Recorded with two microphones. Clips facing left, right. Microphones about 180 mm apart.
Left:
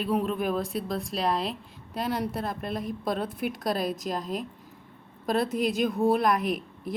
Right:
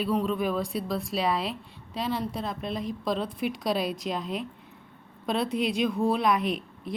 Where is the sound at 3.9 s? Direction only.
Centre (ahead or behind).